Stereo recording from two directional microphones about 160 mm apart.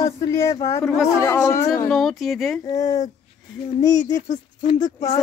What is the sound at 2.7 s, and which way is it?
Speech, 20° left (ahead or behind).